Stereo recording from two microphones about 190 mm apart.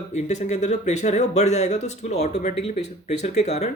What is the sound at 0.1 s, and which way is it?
Speech, 35° left (ahead or behind).